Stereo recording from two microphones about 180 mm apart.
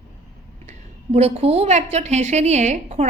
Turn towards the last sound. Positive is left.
turn(degrees=-40)  # may be behind; listen again after turning